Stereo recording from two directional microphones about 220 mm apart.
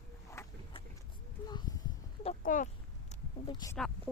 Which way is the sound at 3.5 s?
20° left (ahead or behind).